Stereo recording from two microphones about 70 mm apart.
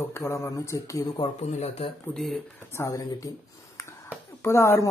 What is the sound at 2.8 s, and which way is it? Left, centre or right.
Speech, left.